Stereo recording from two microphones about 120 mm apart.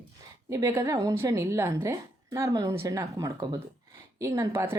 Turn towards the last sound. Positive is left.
turn(degrees=-25)  # may be behind; listen again after turning